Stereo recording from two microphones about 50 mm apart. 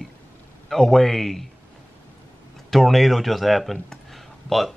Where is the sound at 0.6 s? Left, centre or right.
Centre.